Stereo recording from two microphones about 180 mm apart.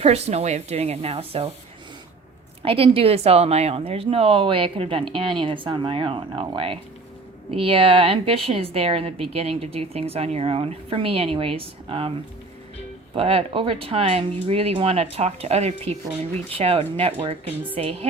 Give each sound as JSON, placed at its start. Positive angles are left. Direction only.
{"t": 0.0, "sound": "a woman's voice", "side_deg": -35}
{"t": 2.6, "sound": "a woman's voice", "side_deg": -30}
{"t": 13.1, "sound": "a woman's voice", "side_deg": -35}